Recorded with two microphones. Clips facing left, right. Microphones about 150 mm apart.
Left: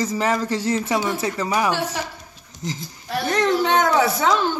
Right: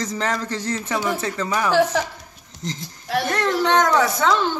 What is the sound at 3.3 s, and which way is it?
Speech, 15° left (ahead or behind).